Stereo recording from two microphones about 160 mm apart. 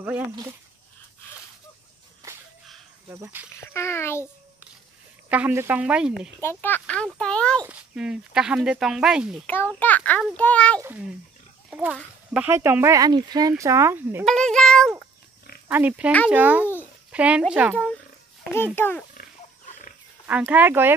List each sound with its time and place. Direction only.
3.1 s speech: 15° right (ahead or behind)
3.7 s a child's voice: 15° left (ahead or behind)
5.3 s speech: 10° right (ahead or behind)
6.4 s a child's voice: 15° left (ahead or behind)
7.6 s speech: 5° right (ahead or behind)
9.5 s a child's voice: 10° left (ahead or behind)
10.8 s speech: 10° right (ahead or behind)
14.2 s speech: 5° left (ahead or behind)
15.7 s speech: 10° right (ahead or behind)
18.8 s a child's voice: 10° left (ahead or behind)
20.2 s speech: 10° right (ahead or behind)